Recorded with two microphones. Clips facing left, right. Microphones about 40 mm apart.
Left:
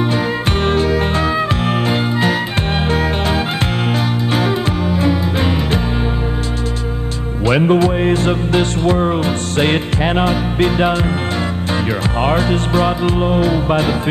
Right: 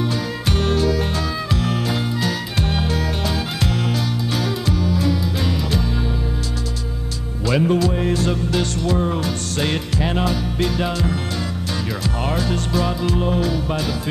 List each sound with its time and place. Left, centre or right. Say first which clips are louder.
0.7 s music: left 4 dB; left
4.3 s music: left 7 dB; left
7.4 s music: left 5 dB; left
12.2 s music: left 8 dB; left